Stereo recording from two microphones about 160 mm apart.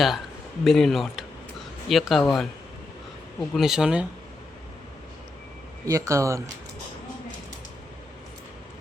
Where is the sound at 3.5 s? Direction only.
Centre (ahead or behind).